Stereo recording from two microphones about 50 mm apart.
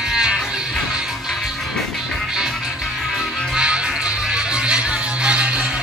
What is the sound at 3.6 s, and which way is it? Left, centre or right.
Music, right.